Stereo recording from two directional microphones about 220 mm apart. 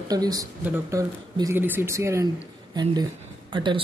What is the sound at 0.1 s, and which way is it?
Speech, 15° right (ahead or behind).